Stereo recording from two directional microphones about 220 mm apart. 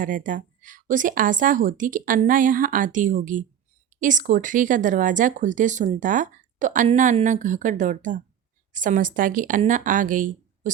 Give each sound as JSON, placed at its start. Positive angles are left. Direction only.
{"t": 0.0, "sound": "speech", "side_deg": -35}